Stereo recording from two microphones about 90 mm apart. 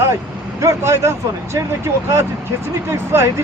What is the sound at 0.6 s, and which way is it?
A man's voice, 35° right (ahead or behind).